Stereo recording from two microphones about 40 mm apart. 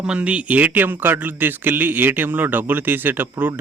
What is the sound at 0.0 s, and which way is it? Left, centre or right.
A man's voice, right.